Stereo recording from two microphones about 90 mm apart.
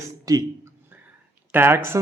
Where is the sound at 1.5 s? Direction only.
25° right (ahead or behind).